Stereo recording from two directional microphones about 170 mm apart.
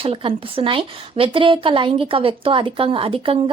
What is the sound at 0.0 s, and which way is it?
Speech, 30° right (ahead or behind).